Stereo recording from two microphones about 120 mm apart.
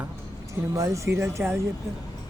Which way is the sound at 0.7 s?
25° right (ahead or behind).